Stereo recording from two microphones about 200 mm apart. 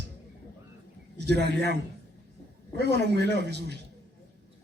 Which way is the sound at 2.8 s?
60° right (ahead or behind).